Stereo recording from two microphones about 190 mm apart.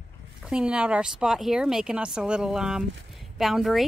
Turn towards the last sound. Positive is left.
turn(degrees=0)  # may be behind; listen again after turning